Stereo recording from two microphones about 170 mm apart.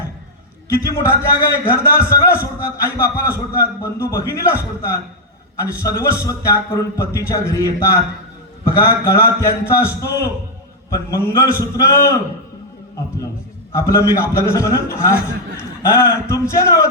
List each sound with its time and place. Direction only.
0.7 s a man's voice: 15° left (ahead or behind)
13.7 s a man's voice: 15° left (ahead or behind)